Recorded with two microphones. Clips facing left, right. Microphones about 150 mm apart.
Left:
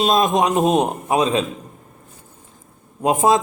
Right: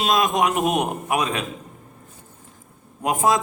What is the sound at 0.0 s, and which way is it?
A man's voice, 25° left (ahead or behind).